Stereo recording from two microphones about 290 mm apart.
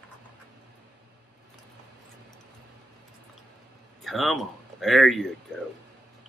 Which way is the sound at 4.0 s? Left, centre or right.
Centre.